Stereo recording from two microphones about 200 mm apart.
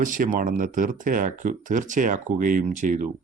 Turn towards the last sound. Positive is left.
turn(degrees=-40)  # may be behind; listen again after turning